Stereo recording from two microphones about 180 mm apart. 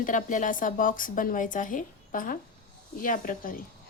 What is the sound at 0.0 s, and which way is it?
A woman's voice, 45° left (ahead or behind).